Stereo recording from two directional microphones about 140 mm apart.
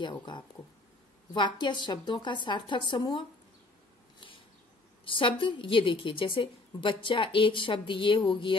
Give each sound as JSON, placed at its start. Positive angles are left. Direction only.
{"t": 0.0, "sound": "a woman's voice", "side_deg": 35}
{"t": 5.0, "sound": "a woman's voice", "side_deg": 40}